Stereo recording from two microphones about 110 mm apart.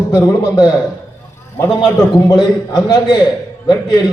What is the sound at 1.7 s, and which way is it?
A man's voice, 40° left (ahead or behind).